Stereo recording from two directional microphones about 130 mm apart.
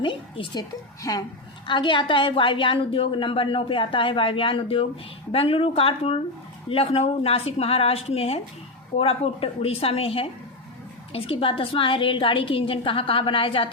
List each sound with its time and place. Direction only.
0.0 s a woman's voice: 40° left (ahead or behind)